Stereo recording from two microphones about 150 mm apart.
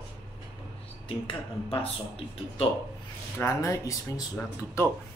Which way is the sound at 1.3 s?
40° left (ahead or behind).